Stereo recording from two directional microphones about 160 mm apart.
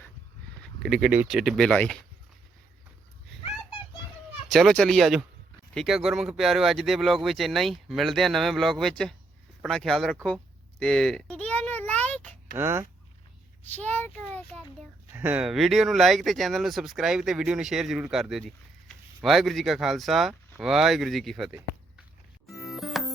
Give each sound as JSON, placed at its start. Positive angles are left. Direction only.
{"t": 0.6, "sound": "speech", "side_deg": 0}
{"t": 1.4, "sound": "speech", "side_deg": 0}
{"t": 3.4, "sound": "a sound", "side_deg": 35}
{"t": 4.4, "sound": "speech", "side_deg": 5}
{"t": 10.2, "sound": "a sound", "side_deg": 5}
{"t": 12.5, "sound": "speech", "side_deg": -15}
{"t": 13.7, "sound": "a child's voice", "side_deg": 10}
{"t": 15.1, "sound": "speech", "side_deg": -10}
{"t": 22.4, "sound": "music", "side_deg": 0}